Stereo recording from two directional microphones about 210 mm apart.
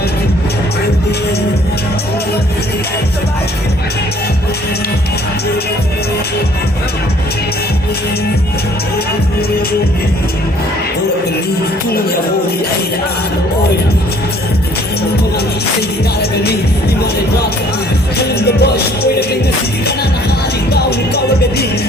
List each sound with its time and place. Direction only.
17.0 s music: 50° left (ahead or behind)